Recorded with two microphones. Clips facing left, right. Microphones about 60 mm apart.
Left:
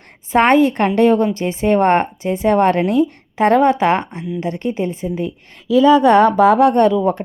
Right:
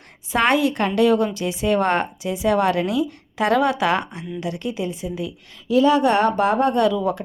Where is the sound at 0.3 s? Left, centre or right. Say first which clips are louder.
Left 6 dB; left.